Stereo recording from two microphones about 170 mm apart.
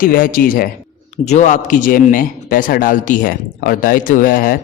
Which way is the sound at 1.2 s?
45° left (ahead or behind).